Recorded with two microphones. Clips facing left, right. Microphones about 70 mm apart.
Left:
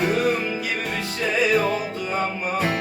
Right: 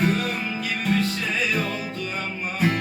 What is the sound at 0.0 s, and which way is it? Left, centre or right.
Music, centre.